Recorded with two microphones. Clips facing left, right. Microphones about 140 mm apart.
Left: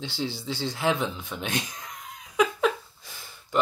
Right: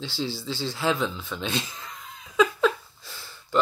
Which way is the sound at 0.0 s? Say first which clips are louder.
Right 1 dB; 20° left (ahead or behind).